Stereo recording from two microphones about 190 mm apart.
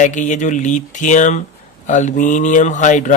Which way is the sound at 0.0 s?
40° left (ahead or behind).